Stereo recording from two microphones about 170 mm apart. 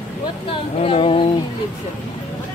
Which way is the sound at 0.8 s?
35° left (ahead or behind).